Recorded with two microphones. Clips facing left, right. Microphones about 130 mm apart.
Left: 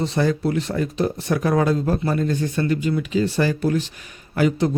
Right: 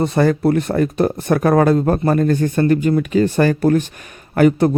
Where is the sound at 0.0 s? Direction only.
55° right (ahead or behind).